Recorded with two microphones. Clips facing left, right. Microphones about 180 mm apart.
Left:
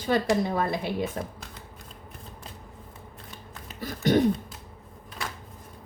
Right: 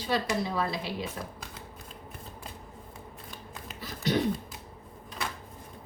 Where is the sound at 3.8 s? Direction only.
50° left (ahead or behind).